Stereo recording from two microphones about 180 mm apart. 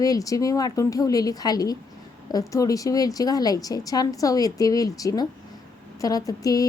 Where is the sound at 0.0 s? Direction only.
20° left (ahead or behind).